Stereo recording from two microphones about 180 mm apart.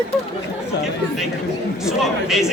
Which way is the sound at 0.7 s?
70° left (ahead or behind).